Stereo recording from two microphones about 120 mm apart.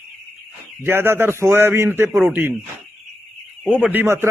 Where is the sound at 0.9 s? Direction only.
20° right (ahead or behind).